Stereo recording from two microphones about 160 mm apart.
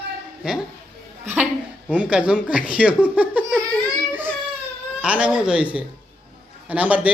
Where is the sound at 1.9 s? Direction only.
5° right (ahead or behind).